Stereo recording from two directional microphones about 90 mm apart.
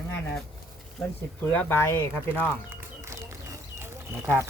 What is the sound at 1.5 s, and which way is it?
Speech, 20° left (ahead or behind).